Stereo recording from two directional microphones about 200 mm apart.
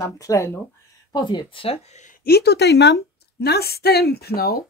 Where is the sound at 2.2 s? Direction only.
50° left (ahead or behind).